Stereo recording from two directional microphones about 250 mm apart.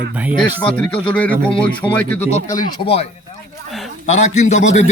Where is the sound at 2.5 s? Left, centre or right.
Left.